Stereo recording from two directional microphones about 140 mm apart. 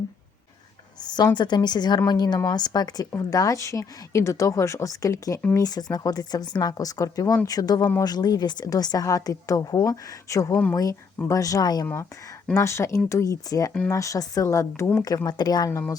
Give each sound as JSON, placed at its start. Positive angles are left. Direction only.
{"t": 0.9, "sound": "a woman's voice", "side_deg": 30}
{"t": 10.5, "sound": "speech", "side_deg": 10}
{"t": 10.8, "sound": "a woman's voice", "side_deg": 25}